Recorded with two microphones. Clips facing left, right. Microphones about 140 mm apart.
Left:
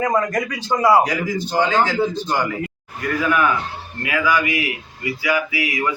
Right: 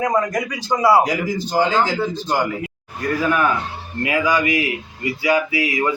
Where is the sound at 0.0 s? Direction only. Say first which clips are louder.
Even; 10° right (ahead or behind).